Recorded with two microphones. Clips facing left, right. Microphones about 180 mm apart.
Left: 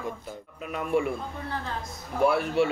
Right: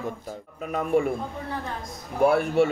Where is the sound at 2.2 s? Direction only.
50° right (ahead or behind).